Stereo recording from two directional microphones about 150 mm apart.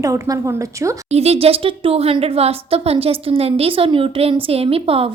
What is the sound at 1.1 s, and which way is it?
Speech, 45° right (ahead or behind).